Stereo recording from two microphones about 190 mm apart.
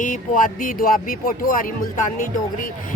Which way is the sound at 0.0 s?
45° left (ahead or behind).